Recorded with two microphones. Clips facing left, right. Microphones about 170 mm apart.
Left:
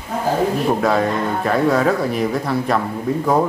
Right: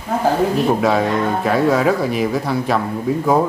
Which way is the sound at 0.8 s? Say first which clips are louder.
Right 1 dB; centre (ahead or behind).